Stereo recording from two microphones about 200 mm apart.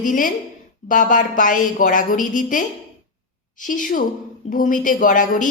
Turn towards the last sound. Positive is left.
turn(degrees=40)  # may be behind; listen again after turning